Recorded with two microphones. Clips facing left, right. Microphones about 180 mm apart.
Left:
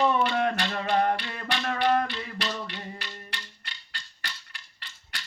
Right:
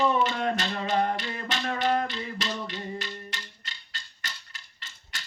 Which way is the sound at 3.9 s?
45° right (ahead or behind).